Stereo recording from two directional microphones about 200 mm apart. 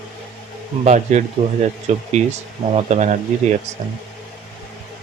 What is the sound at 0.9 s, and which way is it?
Speech, 35° right (ahead or behind).